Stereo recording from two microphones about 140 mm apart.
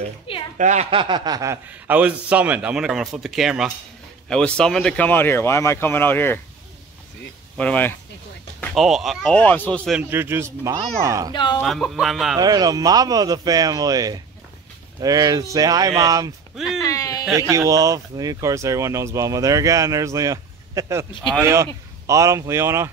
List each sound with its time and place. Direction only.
0.6 s speech: 55° right (ahead or behind)
0.8 s snicker: 35° right (ahead or behind)
1.7 s a man's voice: 10° right (ahead or behind); by 6.4 s 15° left (ahead or behind)
7.5 s speech: 10° left (ahead or behind)
8.7 s speech: centre (ahead or behind)
9.3 s speech: 10° left (ahead or behind)
10.0 s speech: 15° right (ahead or behind)
11.3 s speech: 30° left (ahead or behind)
11.6 s speech: centre (ahead or behind)
12.4 s speech: 30° right (ahead or behind)
16.5 s a sound: centre (ahead or behind)
16.8 s a sound: 25° left (ahead or behind)
17.4 s speech: 25° right (ahead or behind)